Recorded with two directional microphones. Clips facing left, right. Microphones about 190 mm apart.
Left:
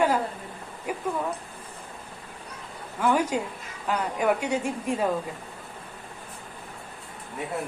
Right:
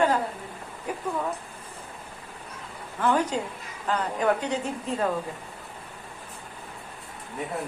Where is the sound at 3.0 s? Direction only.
10° left (ahead or behind).